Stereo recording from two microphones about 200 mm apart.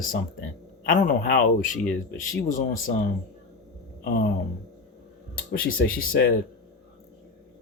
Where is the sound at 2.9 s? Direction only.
45° left (ahead or behind).